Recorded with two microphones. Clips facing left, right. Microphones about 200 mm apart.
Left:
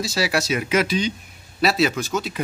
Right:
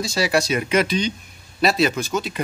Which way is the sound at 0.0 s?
5° left (ahead or behind).